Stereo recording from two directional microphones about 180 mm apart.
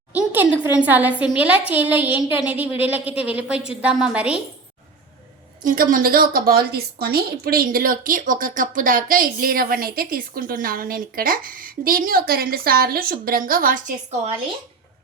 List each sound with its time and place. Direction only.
0.1 s a woman's voice: 10° right (ahead or behind)
5.6 s a woman's voice: 50° right (ahead or behind)